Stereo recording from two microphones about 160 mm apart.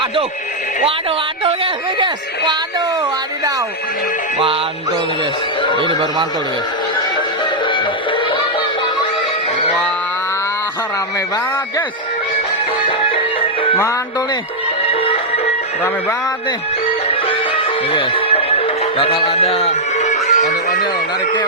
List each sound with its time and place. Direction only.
1.5 s speech: 30° right (ahead or behind)
5.8 s speech: 30° right (ahead or behind)
7.6 s music: 30° left (ahead or behind)
12.9 s music: 35° left (ahead or behind)
14.8 s music: 35° left (ahead or behind)
17.8 s music: 35° left (ahead or behind); by 20.8 s 50° left (ahead or behind)